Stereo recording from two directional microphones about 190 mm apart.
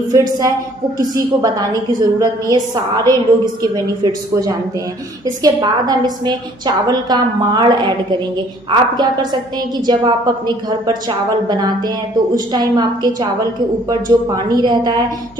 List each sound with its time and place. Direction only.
0.1 s a woman's voice: 20° right (ahead or behind)